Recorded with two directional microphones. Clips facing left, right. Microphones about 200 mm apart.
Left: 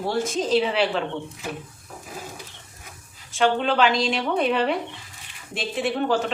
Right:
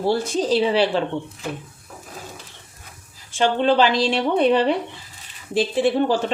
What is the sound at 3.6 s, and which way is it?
Speech, 30° right (ahead or behind).